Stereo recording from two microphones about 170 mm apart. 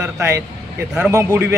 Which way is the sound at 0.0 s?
15° right (ahead or behind).